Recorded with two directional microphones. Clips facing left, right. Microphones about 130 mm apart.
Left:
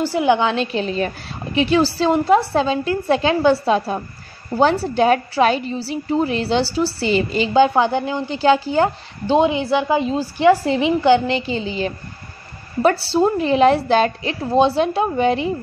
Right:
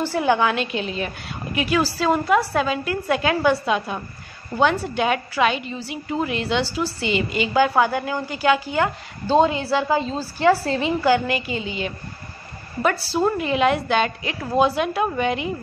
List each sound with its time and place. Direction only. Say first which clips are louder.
0.0 s a woman's voice: left 3 dB; 15° left (ahead or behind)
9.3 s a woman's voice: left 2 dB; 20° left (ahead or behind)